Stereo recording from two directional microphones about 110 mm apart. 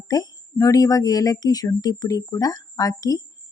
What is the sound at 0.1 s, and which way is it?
A woman's voice, 35° left (ahead or behind).